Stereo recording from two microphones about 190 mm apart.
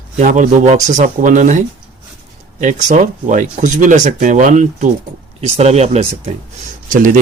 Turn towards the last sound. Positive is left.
turn(degrees=-45)  # may be behind; listen again after turning